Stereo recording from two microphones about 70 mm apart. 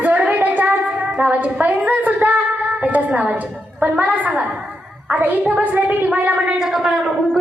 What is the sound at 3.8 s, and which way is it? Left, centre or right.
A woman's voice, centre.